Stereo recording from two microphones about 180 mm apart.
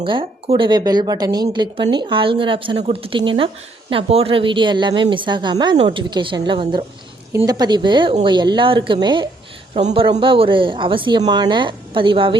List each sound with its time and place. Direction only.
0.0 s speech: 30° right (ahead or behind)